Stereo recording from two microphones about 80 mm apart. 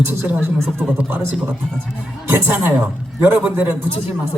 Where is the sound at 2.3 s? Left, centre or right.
Right.